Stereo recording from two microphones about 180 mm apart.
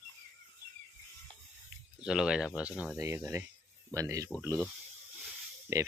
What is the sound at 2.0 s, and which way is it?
Speech, 5° right (ahead or behind).